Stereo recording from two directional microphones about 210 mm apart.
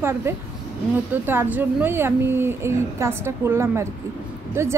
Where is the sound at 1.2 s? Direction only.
10° right (ahead or behind).